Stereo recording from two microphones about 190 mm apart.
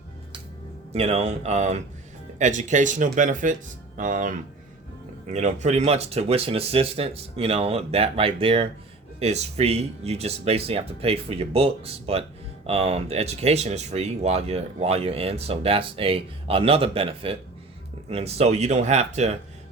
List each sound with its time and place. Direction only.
0.9 s speech: 35° right (ahead or behind)